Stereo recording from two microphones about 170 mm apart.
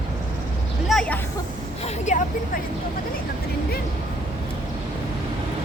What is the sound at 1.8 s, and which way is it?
Speech, 45° left (ahead or behind).